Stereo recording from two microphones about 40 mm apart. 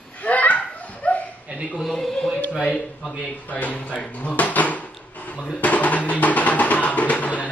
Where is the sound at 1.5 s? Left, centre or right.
Right.